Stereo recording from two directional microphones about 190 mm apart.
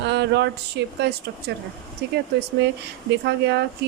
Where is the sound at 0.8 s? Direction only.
70° right (ahead or behind).